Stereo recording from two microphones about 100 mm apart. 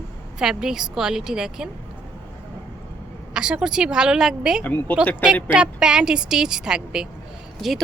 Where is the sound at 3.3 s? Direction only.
10° right (ahead or behind).